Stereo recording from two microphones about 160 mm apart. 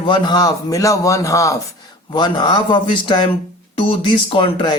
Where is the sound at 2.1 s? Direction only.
30° left (ahead or behind).